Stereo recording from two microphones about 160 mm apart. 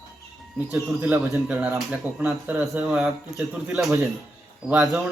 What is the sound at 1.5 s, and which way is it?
Speech, centre (ahead or behind).